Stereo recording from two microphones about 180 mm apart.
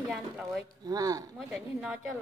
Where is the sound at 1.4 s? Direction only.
5° right (ahead or behind).